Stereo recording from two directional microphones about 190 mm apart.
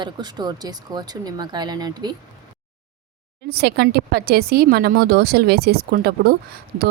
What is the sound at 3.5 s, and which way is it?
Speech, 60° right (ahead or behind).